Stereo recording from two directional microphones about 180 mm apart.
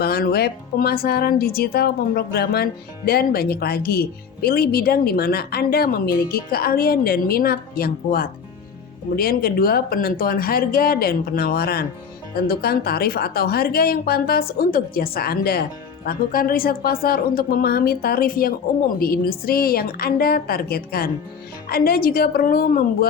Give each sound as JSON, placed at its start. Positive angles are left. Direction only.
{"t": 0.0, "sound": "speech", "side_deg": 60}